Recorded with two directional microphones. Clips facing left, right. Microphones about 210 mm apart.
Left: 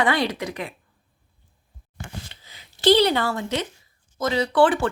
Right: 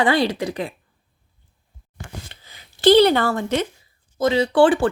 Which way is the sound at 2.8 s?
55° right (ahead or behind).